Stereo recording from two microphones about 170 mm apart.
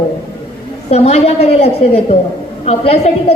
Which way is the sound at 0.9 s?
35° left (ahead or behind).